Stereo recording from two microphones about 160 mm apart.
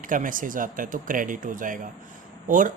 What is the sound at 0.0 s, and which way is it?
Speech, 55° right (ahead or behind).